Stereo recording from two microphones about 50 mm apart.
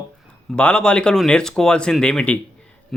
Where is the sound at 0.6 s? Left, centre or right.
Left.